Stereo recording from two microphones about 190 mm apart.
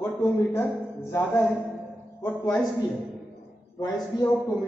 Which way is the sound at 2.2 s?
10° left (ahead or behind).